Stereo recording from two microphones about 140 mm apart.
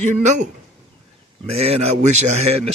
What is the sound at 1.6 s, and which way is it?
Speech, 50° right (ahead or behind).